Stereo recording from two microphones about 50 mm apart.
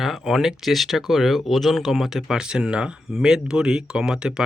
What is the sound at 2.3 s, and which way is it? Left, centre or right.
Speech, centre.